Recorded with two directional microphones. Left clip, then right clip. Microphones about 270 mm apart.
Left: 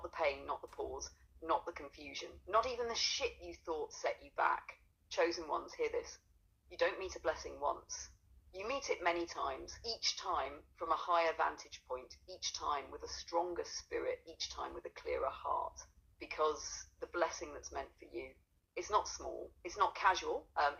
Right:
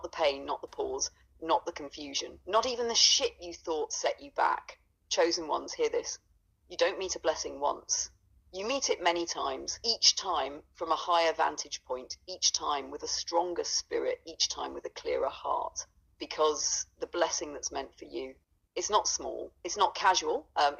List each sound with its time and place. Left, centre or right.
0.0 s a woman's voice: right